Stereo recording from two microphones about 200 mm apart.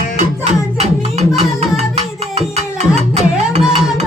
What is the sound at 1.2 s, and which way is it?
Music, 35° right (ahead or behind).